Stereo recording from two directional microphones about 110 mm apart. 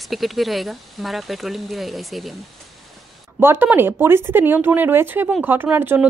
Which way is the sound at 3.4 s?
20° right (ahead or behind).